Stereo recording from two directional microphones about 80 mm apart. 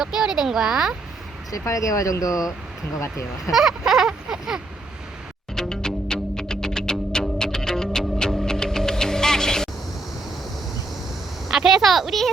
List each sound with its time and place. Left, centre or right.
0.0 s speech: centre
1.5 s speech: left
3.5 s a sound: centre
5.5 s music: centre
11.4 s a woman's voice: centre